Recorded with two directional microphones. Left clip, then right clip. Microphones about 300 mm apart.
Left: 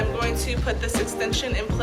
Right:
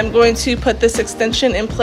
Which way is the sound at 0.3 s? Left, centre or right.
Centre.